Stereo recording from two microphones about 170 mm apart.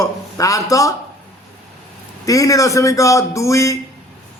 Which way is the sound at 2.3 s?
20° left (ahead or behind).